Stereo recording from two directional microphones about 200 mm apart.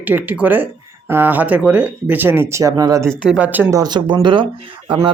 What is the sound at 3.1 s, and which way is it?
Speech, 5° right (ahead or behind).